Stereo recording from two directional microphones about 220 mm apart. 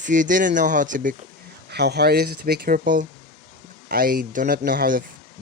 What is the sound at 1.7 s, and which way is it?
Speech, 50° right (ahead or behind).